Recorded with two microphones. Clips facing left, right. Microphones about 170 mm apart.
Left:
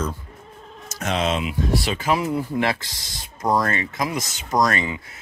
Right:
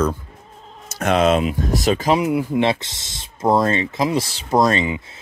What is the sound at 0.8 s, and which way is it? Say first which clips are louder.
Speech: right 7 dB; 60° right (ahead or behind).